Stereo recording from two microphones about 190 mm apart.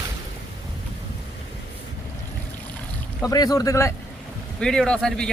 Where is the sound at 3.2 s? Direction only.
20° left (ahead or behind).